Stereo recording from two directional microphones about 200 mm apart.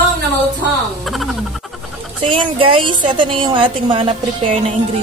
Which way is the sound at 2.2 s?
25° right (ahead or behind).